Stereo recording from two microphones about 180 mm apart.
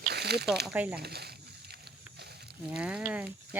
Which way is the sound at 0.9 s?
60° right (ahead or behind).